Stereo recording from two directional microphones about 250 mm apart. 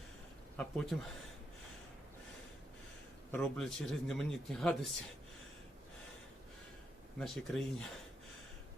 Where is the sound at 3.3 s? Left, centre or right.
Centre.